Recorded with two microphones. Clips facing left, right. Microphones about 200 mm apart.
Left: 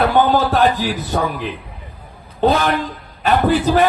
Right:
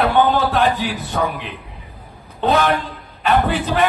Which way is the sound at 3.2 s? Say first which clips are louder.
Left 3 dB; 40° left (ahead or behind).